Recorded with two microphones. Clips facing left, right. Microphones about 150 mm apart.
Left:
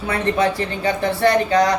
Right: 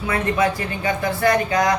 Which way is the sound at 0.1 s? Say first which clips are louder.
Left 1 dB; 30° left (ahead or behind).